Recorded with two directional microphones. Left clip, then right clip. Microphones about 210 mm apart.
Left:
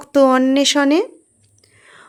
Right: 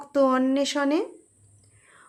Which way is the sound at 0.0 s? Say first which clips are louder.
Left 9 dB; 30° left (ahead or behind).